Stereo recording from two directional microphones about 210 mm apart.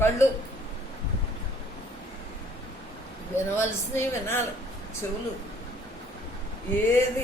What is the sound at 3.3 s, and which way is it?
Speech, 10° left (ahead or behind).